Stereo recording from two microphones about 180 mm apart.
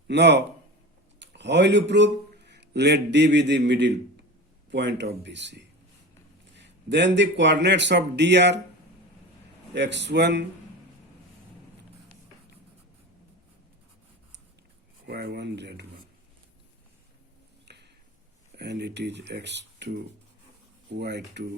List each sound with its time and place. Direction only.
0.1 s a man's voice: 75° right (ahead or behind)
6.6 s a man's voice: 80° right
9.7 s a man's voice: 75° right (ahead or behind)
15.0 s a man's voice: 65° right (ahead or behind)
17.7 s a sound: 70° right (ahead or behind)
18.5 s a man's voice: 70° right (ahead or behind)